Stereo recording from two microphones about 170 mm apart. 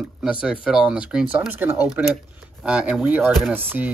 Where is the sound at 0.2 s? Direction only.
5° right (ahead or behind).